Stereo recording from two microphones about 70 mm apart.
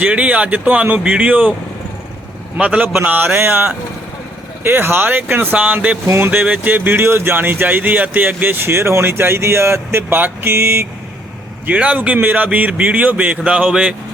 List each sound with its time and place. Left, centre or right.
0.0 s speech: centre
2.6 s a man's voice: centre
6.1 s speech: right
11.6 s speech: centre